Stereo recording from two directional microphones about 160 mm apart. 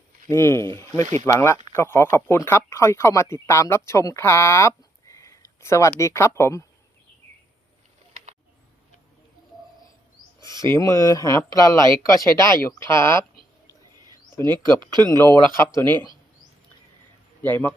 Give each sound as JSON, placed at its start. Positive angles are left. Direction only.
{"t": 0.3, "sound": "speech", "side_deg": 15}
{"t": 8.1, "sound": "a sound", "side_deg": -45}
{"t": 10.4, "sound": "speech", "side_deg": 20}
{"t": 14.4, "sound": "speech", "side_deg": -25}
{"t": 15.5, "sound": "speech", "side_deg": 15}
{"t": 17.4, "sound": "speech", "side_deg": 10}